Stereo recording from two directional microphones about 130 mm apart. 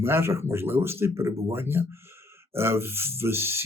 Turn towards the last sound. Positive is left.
turn(degrees=-20)  # may be behind; listen again after turning